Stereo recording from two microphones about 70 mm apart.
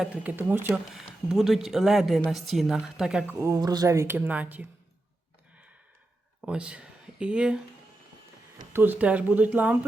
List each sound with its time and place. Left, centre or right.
0.1 s speech: right
0.9 s speech: centre
3.6 s speech: right
3.8 s speech: right
4.3 s speech: right
6.4 s speech: centre
8.7 s speech: right